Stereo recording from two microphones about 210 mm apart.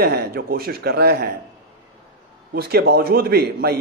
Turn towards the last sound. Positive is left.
turn(degrees=-50)  # may be behind; listen again after turning